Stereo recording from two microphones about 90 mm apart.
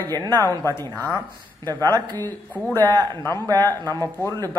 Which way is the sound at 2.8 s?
50° right (ahead or behind).